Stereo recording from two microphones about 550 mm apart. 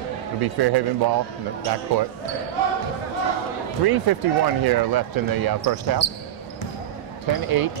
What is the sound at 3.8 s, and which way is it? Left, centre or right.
Speech, right.